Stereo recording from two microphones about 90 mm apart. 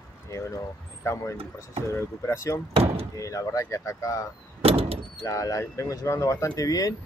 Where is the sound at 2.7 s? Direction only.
90° right.